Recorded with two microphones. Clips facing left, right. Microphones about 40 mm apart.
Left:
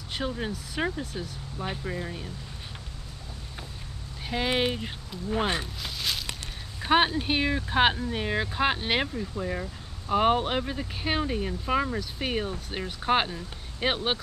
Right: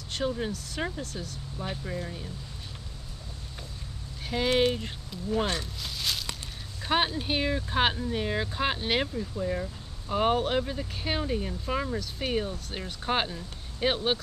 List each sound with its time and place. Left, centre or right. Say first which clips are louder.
0.1 s speech: right 1 dB; centre
4.3 s speech: right 2 dB; centre
5.3 s speech: left 1 dB; left
5.8 s a sound: left 1 dB; centre
6.8 s speech: left 4 dB; centre